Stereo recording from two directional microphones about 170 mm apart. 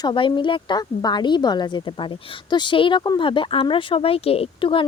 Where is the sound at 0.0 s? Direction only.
30° left (ahead or behind).